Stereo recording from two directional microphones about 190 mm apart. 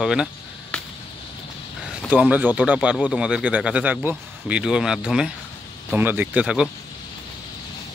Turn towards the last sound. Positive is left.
turn(degrees=-5)  # may be behind; listen again after turning